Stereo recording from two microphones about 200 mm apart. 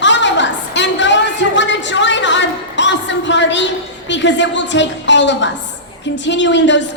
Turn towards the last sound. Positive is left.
turn(degrees=65)  # may be behind; listen again after turning